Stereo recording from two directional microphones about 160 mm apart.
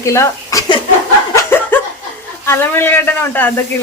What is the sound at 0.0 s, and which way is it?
Speech, 20° left (ahead or behind).